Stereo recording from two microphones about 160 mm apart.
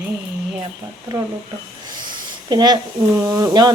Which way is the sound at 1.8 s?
30° right (ahead or behind).